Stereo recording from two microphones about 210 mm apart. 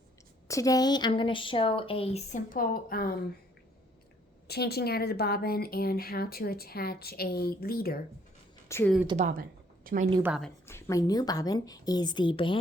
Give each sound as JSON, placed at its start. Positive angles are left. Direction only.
{"t": 0.4, "sound": "speech", "side_deg": 15}
{"t": 4.4, "sound": "a woman's voice", "side_deg": 50}
{"t": 8.7, "sound": "a woman's voice", "side_deg": 10}
{"t": 9.1, "sound": "a woman's voice", "side_deg": -40}
{"t": 10.7, "sound": "speech", "side_deg": 15}